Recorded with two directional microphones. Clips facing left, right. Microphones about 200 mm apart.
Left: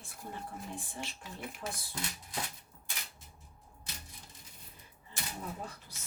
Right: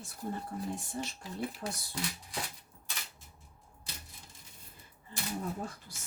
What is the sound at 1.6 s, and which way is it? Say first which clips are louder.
Speech: right 2 dB; 35° right (ahead or behind).